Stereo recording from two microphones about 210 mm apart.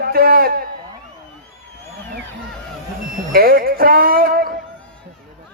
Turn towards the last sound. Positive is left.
turn(degrees=-45)  # may be behind; listen again after turning